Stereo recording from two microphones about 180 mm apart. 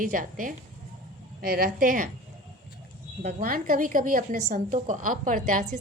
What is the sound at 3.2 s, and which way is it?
A woman's voice, 50° right (ahead or behind).